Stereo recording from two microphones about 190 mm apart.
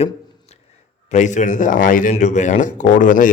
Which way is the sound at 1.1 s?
40° left (ahead or behind).